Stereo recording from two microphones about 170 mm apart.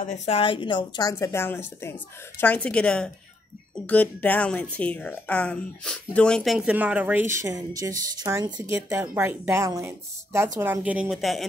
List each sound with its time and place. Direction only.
0.0 s a woman's voice: 45° left (ahead or behind); by 11.4 s centre (ahead or behind)